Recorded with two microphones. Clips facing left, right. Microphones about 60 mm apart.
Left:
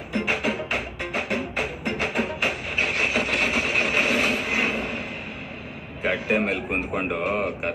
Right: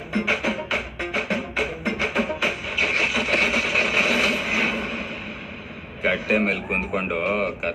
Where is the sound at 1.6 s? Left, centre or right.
Right.